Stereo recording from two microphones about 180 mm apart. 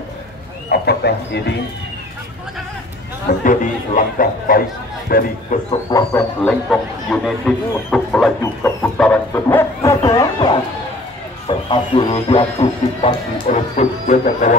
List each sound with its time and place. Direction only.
0.7 s speech: 65° left (ahead or behind)
3.4 s speech: 50° left (ahead or behind)
5.9 s speech: 20° left (ahead or behind)
6.4 s speech: centre (ahead or behind)
8.6 s speech: 15° left (ahead or behind); by 13.1 s 30° left (ahead or behind)
13.5 s speech: 40° left (ahead or behind)